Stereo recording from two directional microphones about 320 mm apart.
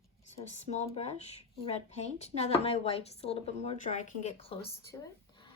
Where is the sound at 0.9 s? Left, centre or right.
Centre.